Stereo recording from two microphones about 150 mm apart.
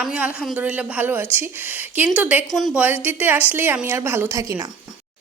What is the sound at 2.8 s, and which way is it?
A woman's voice, 10° right (ahead or behind).